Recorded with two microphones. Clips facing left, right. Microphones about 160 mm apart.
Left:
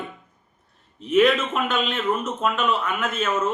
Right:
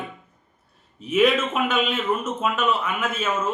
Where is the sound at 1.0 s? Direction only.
5° right (ahead or behind).